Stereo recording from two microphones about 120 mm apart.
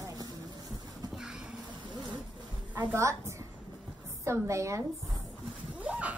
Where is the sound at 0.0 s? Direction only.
30° right (ahead or behind).